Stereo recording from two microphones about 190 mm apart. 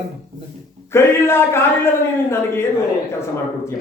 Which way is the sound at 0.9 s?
15° left (ahead or behind).